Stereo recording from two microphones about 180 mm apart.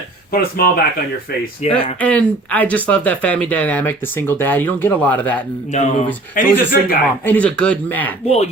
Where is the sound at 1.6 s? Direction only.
40° left (ahead or behind).